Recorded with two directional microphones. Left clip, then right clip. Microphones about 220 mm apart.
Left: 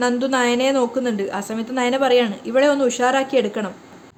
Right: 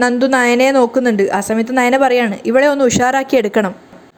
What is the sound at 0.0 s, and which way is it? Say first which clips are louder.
A woman's voice: right 6 dB; 25° right (ahead or behind).